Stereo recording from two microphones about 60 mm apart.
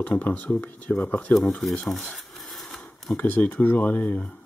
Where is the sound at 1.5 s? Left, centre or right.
Centre.